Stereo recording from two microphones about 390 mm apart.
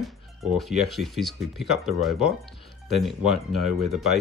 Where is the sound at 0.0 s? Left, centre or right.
Centre.